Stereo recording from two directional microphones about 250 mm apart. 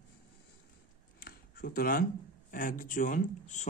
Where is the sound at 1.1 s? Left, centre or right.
Left.